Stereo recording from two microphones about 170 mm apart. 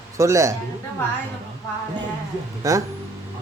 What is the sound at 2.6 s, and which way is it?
Speech, 20° right (ahead or behind).